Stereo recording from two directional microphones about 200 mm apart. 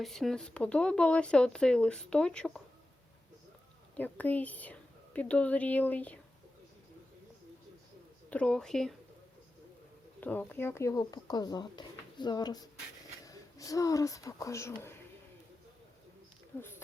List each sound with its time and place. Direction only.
0.0 s speech: centre (ahead or behind)
3.9 s a woman's voice: 10° left (ahead or behind)
8.3 s speech: 5° left (ahead or behind)
10.2 s speech: 10° left (ahead or behind)
16.5 s a woman's voice: 10° left (ahead or behind)